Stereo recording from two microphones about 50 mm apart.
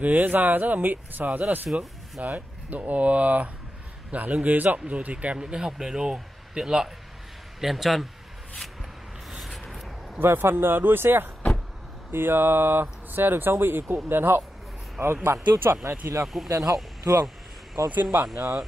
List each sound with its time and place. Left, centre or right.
0.0 s speech: right
1.7 s speech: centre
2.2 s a man's voice: right; by 8.1 s centre
9.4 s a sound: centre
10.1 s speech: right
16.4 s speech: right
18.3 s speech: right